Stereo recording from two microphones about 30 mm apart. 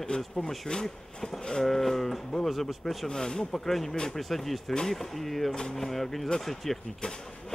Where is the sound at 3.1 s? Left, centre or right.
Centre.